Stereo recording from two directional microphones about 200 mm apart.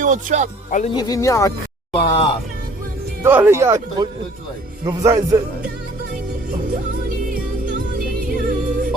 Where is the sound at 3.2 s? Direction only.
10° right (ahead or behind).